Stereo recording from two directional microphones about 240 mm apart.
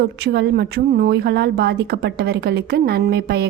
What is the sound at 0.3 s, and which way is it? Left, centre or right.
A woman's voice, right.